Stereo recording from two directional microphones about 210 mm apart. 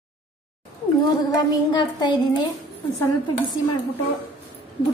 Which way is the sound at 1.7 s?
20° left (ahead or behind).